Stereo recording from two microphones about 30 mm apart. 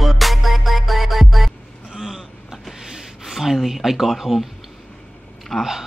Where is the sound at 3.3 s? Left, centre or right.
Centre.